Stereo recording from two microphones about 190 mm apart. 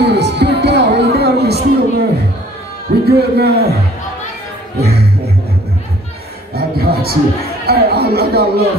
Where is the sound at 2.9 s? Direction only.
55° right (ahead or behind).